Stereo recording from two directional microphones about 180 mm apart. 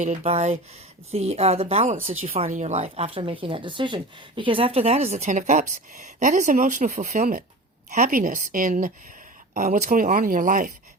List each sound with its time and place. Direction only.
0.0 s speech: 40° right (ahead or behind)